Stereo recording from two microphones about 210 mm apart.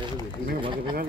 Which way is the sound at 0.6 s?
25° right (ahead or behind).